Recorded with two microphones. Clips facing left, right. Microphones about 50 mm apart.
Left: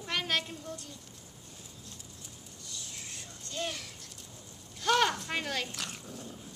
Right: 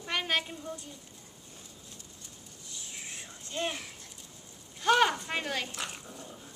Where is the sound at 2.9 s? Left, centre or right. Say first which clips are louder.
Right 2 dB; right.